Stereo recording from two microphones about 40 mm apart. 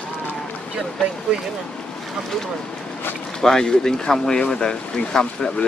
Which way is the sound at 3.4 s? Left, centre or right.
Centre.